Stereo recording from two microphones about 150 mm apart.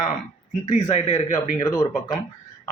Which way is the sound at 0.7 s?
45° left (ahead or behind).